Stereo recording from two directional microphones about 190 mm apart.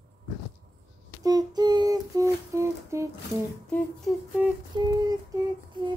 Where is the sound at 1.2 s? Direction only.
20° right (ahead or behind).